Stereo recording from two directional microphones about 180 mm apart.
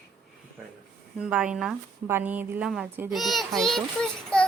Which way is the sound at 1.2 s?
5° right (ahead or behind).